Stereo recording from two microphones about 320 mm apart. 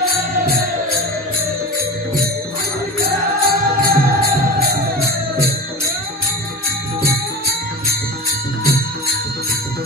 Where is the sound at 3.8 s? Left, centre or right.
Right.